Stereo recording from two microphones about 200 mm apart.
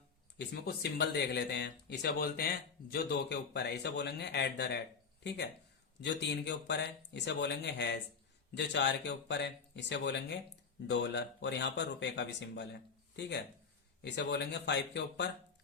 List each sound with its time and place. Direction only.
0.3 s speech: 55° left (ahead or behind)
6.0 s speech: 60° left (ahead or behind)